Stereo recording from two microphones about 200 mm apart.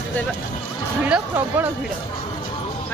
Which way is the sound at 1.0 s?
10° right (ahead or behind).